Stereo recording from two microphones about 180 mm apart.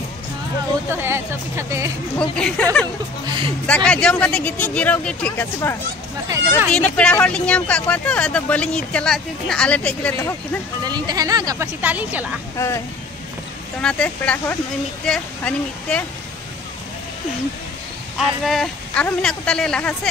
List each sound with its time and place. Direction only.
0.8 s speech: 15° right (ahead or behind)
2.1 s speech: 5° left (ahead or behind)
3.3 s a sound: 25° right (ahead or behind)
3.6 s speech: 5° left (ahead or behind)
10.9 s speech: 20° right (ahead or behind)
12.5 s speech: 15° left (ahead or behind)
13.7 s speech: 5° left (ahead or behind)
18.1 s speech: centre (ahead or behind)